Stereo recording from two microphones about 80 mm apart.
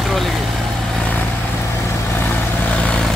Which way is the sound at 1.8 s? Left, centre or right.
Left.